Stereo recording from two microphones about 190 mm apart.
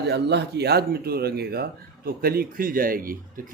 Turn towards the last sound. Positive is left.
turn(degrees=-50)  # may be behind; listen again after turning